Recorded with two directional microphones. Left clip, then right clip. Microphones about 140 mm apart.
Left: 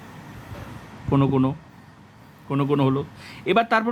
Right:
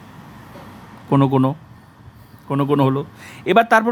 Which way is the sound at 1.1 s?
30° right (ahead or behind).